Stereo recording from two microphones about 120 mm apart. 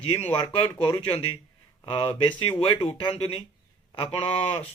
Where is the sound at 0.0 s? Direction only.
55° left (ahead or behind).